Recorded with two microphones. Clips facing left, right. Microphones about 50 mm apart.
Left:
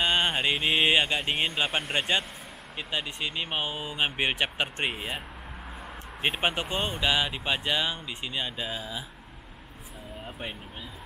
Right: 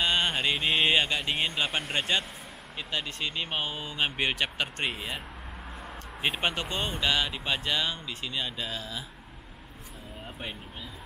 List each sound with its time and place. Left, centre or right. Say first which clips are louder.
0.0 s speech: left 1 dB; centre
6.2 s speech: left 2 dB; centre